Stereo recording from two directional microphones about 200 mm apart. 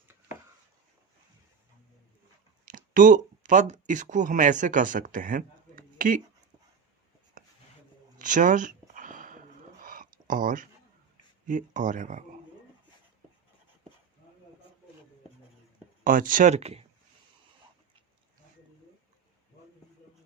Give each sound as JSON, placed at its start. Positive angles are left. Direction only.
{"t": 2.6, "sound": "speech", "side_deg": -40}
{"t": 7.4, "sound": "a sound", "side_deg": -45}
{"t": 11.4, "sound": "speech", "side_deg": -40}
{"t": 16.0, "sound": "speech", "side_deg": -45}